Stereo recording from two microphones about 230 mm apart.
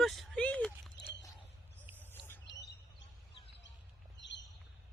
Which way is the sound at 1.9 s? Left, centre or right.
Centre.